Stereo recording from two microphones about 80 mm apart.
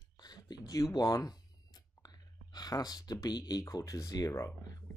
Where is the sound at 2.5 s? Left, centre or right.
Left.